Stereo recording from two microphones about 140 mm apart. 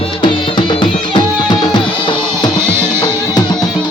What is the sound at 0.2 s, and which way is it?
Music, 35° left (ahead or behind).